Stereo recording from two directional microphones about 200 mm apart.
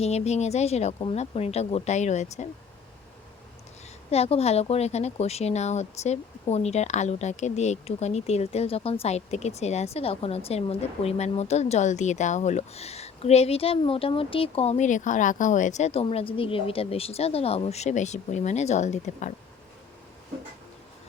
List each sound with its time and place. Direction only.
0.0 s a woman's voice: 35° left (ahead or behind)
4.1 s a woman's voice: 30° left (ahead or behind)